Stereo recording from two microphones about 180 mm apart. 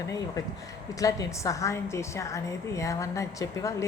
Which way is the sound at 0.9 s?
20° left (ahead or behind).